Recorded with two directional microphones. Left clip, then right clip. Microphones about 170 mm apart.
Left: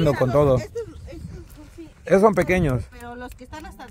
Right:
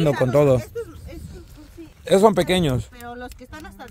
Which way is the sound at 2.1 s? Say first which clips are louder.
Right 1 dB; 25° right (ahead or behind).